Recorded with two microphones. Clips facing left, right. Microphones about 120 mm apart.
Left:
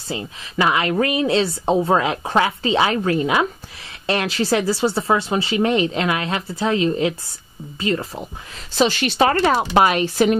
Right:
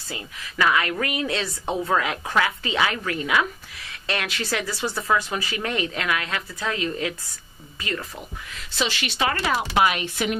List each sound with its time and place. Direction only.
0.1 s speech: 25° left (ahead or behind)
8.7 s speech: 40° left (ahead or behind)